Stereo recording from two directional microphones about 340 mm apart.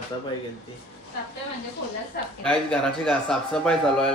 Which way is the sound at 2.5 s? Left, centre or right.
Centre.